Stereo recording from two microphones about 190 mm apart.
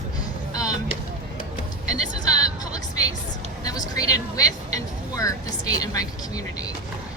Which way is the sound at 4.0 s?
20° left (ahead or behind).